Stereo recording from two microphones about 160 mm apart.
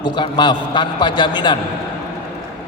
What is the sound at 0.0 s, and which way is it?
A man's voice, 30° left (ahead or behind).